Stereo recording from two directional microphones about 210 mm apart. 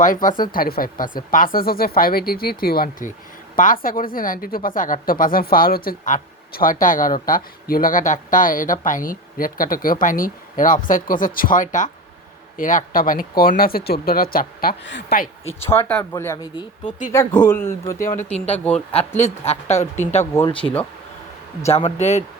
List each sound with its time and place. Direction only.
0.0 s speech: 40° left (ahead or behind)
15.6 s speech: 10° left (ahead or behind)
18.2 s speech: 30° left (ahead or behind)
20.3 s speech: 10° left (ahead or behind)
21.7 s speech: 30° left (ahead or behind)